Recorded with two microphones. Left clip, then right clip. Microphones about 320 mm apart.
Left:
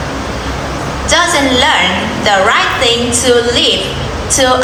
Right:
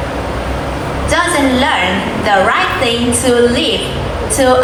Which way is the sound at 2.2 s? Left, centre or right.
Centre.